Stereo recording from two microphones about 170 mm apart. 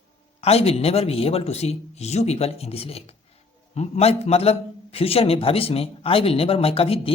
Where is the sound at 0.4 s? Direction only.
35° left (ahead or behind).